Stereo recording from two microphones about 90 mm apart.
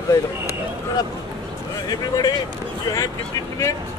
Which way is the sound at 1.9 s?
45° left (ahead or behind).